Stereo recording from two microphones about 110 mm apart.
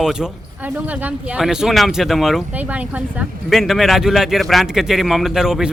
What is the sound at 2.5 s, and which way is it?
Speech, 15° right (ahead or behind).